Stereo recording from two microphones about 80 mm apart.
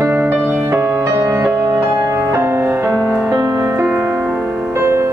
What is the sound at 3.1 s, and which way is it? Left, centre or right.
Music, centre.